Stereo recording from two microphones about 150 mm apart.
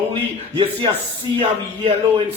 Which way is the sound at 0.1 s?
35° right (ahead or behind).